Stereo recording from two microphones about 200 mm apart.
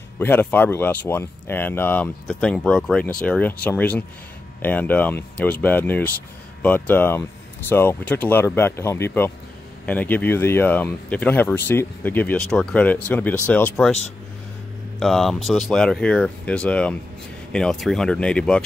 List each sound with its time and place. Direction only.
0.2 s speech: 10° left (ahead or behind)
15.0 s speech: centre (ahead or behind)